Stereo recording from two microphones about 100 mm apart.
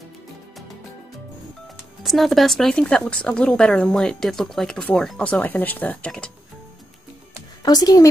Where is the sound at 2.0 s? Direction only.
Centre (ahead or behind).